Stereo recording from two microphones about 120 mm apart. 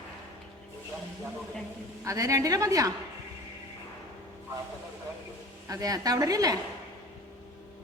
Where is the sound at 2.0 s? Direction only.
25° right (ahead or behind).